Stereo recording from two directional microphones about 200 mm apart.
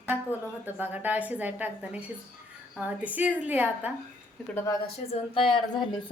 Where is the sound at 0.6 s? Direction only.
10° right (ahead or behind).